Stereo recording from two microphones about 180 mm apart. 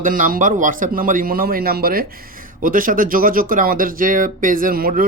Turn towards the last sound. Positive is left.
turn(degrees=-55)  # may be behind; listen again after turning